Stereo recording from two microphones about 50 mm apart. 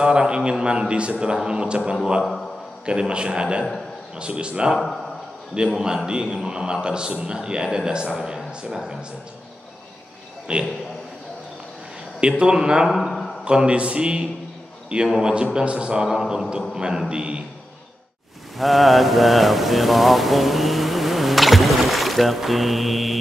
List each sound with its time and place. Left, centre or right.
0.0 s a man's voice: centre
2.8 s a man's voice: centre
10.5 s a man's voice: centre
12.2 s a man's voice: centre
12.9 s a sound: centre
13.4 s a man's voice: centre
15.0 s a man's voice: centre
15.3 s a man's voice: right
16.1 s a man's voice: centre
18.6 s mantra: centre